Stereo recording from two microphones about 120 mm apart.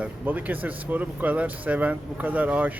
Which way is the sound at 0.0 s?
15° right (ahead or behind).